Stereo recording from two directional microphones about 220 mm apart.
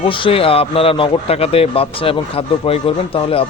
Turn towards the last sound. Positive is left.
turn(degrees=25)  # may be behind; listen again after turning